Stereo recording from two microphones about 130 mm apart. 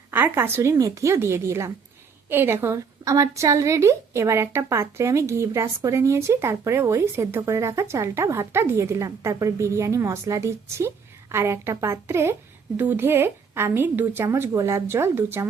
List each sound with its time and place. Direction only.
0.1 s a woman's voice: 15° right (ahead or behind)